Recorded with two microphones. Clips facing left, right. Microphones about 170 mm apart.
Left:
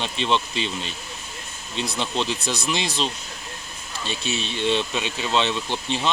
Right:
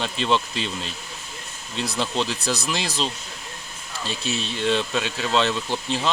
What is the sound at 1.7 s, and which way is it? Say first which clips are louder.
Speech: right 1 dB; 5° right (ahead or behind).